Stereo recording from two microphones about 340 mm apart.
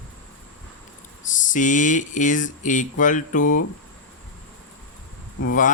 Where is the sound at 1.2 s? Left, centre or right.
Left.